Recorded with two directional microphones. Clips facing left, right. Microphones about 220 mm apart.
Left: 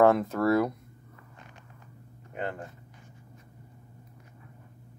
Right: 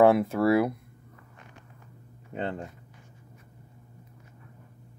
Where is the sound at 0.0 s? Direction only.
10° right (ahead or behind).